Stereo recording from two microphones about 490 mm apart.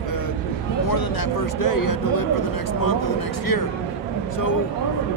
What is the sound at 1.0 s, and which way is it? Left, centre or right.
Speech, left.